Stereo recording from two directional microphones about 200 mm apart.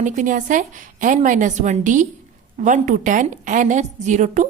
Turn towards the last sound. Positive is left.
turn(degrees=-35)  # may be behind; listen again after turning